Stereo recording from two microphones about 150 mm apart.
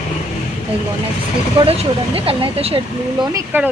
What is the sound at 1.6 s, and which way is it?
Speech, 40° right (ahead or behind).